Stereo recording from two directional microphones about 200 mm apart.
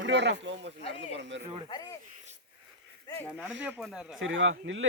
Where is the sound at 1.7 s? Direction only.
15° left (ahead or behind).